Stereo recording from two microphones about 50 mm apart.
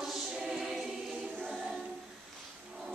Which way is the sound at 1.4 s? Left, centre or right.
Centre.